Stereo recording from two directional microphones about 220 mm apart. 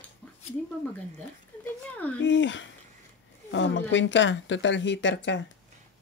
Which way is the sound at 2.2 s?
55° left (ahead or behind).